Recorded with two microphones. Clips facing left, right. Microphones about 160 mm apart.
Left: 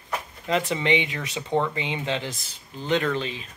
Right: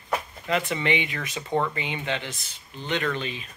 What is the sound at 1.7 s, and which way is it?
Speech, 25° left (ahead or behind).